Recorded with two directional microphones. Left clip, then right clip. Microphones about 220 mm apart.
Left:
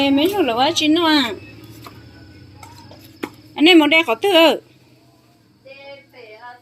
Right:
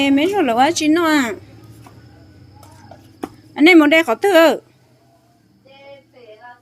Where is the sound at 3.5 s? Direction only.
20° right (ahead or behind).